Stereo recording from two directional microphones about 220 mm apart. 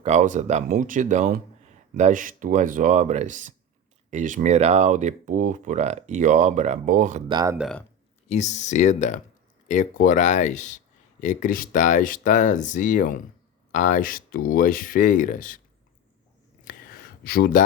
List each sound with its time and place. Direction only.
0.0 s speech: 35° right (ahead or behind)
7.3 s speech: 20° right (ahead or behind)
7.6 s speech: 5° left (ahead or behind)
8.3 s speech: 30° left (ahead or behind)
16.6 s a sound: 45° left (ahead or behind)